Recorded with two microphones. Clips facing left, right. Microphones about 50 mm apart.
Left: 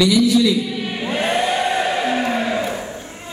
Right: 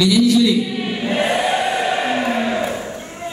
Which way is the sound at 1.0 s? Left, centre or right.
Centre.